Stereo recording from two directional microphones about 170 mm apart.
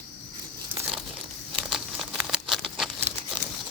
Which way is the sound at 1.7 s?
Centre (ahead or behind).